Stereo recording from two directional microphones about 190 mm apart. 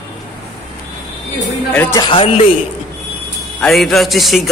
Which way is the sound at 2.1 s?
30° left (ahead or behind).